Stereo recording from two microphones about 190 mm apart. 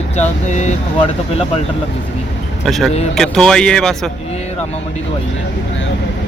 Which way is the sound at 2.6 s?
Centre (ahead or behind).